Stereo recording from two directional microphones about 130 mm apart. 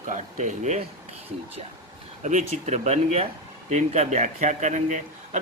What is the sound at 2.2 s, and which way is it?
A man's voice, 65° right (ahead or behind).